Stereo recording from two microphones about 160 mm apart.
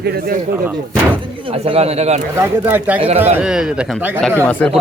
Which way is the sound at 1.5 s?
40° right (ahead or behind).